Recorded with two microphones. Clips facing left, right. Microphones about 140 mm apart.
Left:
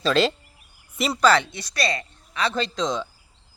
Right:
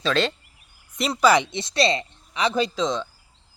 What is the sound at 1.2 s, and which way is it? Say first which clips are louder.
Speech: right 1 dB; 15° right (ahead or behind).